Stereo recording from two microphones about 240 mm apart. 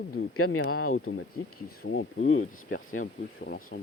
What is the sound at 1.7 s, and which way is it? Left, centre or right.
Speech, left.